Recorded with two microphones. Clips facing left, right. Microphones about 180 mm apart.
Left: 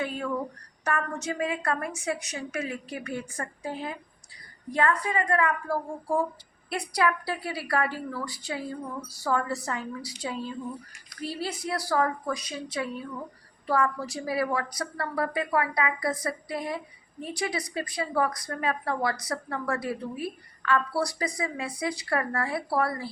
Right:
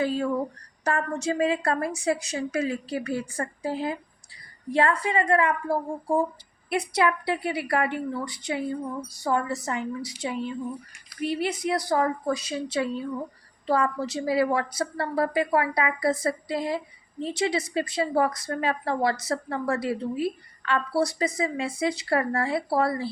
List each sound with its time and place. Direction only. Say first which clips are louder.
0.9 s a woman's voice: right 4 dB; 30° right (ahead or behind)